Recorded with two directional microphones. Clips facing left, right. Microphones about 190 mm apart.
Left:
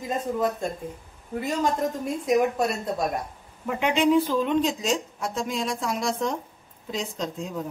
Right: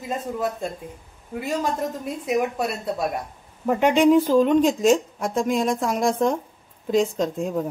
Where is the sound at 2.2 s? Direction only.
5° right (ahead or behind).